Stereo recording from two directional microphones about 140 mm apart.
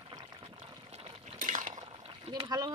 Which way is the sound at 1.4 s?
65° right (ahead or behind).